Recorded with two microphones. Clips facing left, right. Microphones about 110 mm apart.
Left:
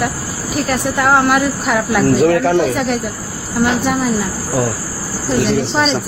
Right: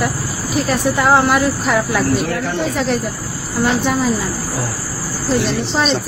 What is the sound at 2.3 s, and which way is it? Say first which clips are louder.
Speech: left 7 dB; 90° left.